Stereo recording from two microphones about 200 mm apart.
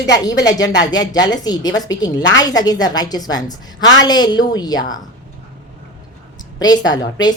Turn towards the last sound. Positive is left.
turn(degrees=20)  # may be behind; listen again after turning